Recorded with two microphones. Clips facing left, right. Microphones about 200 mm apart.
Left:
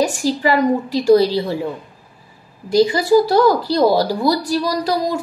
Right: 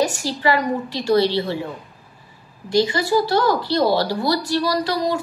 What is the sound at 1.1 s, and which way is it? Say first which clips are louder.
Speech: left 3 dB; 40° left (ahead or behind).